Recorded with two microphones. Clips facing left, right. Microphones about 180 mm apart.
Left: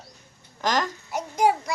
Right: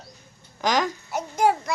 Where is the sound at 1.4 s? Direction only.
10° left (ahead or behind).